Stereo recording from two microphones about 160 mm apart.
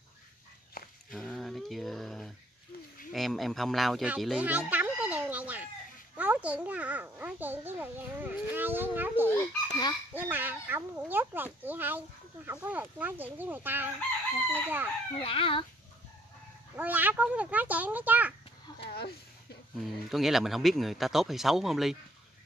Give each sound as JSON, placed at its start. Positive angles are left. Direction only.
{"t": 0.8, "sound": "walk", "side_deg": 65}
{"t": 1.1, "sound": "speech", "side_deg": 0}
{"t": 6.1, "sound": "a sound", "side_deg": -10}
{"t": 9.7, "sound": "fowl", "side_deg": 25}
{"t": 10.1, "sound": "a sound", "side_deg": -10}
{"t": 12.4, "sound": "a child's voice", "side_deg": -10}
{"t": 15.1, "sound": "speech", "side_deg": 35}
{"t": 16.7, "sound": "a child's voice", "side_deg": -10}
{"t": 18.9, "sound": "speech", "side_deg": 80}
{"t": 19.8, "sound": "speech", "side_deg": 0}